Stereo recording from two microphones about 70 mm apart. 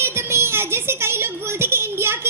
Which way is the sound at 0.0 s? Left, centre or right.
Right.